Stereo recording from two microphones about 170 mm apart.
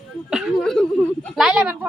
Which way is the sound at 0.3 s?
Centre (ahead or behind).